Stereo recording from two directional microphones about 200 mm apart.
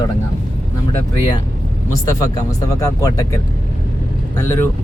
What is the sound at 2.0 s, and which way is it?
Speech, 15° left (ahead or behind).